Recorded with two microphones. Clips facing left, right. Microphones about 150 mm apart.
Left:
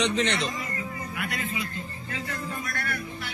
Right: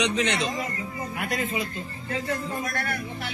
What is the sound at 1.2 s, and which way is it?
Speech, 40° right (ahead or behind).